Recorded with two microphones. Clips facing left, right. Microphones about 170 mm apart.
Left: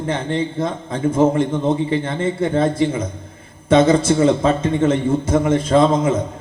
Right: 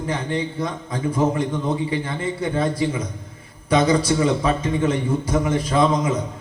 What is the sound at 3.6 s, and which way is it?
A man's voice, 25° left (ahead or behind).